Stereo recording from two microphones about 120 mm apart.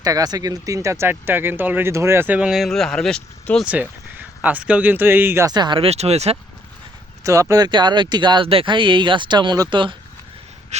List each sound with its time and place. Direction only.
0.0 s speech: 30° right (ahead or behind); by 3.2 s 5° left (ahead or behind)
3.7 s a sound: 15° right (ahead or behind)
4.4 s speech: 10° right (ahead or behind)
5.5 s speech: 35° right (ahead or behind)
5.9 s speech: 60° right (ahead or behind)
7.3 s speech: 25° right (ahead or behind); by 9.9 s 40° right (ahead or behind)